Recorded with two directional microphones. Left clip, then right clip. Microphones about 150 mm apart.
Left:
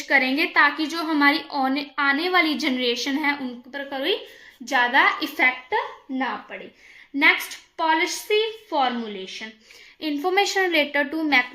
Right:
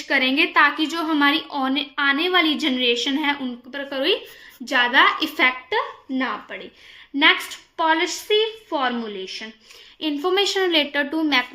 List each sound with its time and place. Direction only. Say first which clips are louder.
0.1 s a woman's voice: right 1 dB; 20° right (ahead or behind)
3.7 s a woman's voice: right 3 dB; 35° right (ahead or behind)